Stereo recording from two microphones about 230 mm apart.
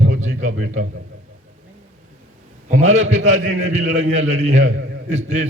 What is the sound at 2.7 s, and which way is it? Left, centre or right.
A man's voice, right.